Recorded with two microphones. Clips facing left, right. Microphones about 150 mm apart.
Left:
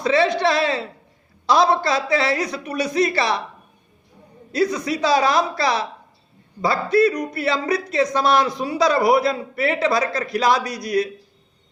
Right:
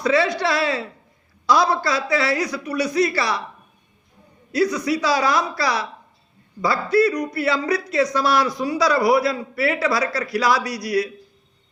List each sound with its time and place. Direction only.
0.0 s a man's voice: 25° left (ahead or behind)
4.5 s a man's voice: 25° left (ahead or behind)